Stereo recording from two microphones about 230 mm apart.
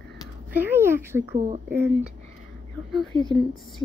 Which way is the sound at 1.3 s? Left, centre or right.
Right.